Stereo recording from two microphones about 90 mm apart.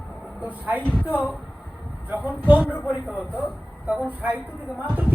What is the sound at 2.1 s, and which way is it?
Speech, 20° right (ahead or behind).